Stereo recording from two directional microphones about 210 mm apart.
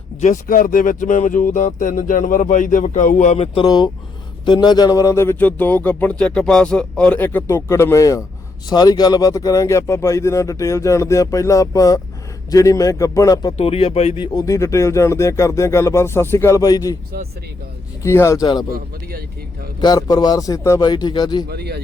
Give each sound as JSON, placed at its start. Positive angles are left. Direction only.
{"t": 0.2, "sound": "a man's voice", "side_deg": 40}
{"t": 13.6, "sound": "a man's voice", "side_deg": 30}
{"t": 18.0, "sound": "a man's voice", "side_deg": 15}
{"t": 19.8, "sound": "a man's voice", "side_deg": 20}
{"t": 21.5, "sound": "speech", "side_deg": -50}